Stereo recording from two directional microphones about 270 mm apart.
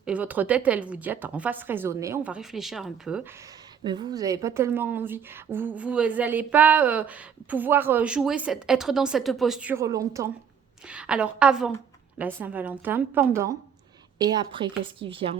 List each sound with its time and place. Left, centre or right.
0.0 s a woman's voice: centre
3.8 s a woman's voice: centre